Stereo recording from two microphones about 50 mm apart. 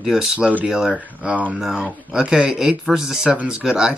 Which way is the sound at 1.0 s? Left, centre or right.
Right.